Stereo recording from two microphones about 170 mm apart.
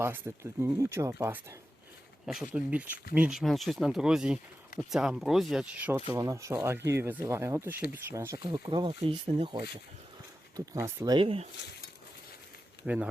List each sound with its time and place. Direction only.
0.0 s speech: 15° right (ahead or behind)
2.2 s speech: 5° right (ahead or behind)
8.7 s speech: 30° right (ahead or behind)
10.8 s speech: 20° right (ahead or behind)
12.8 s speech: 5° right (ahead or behind)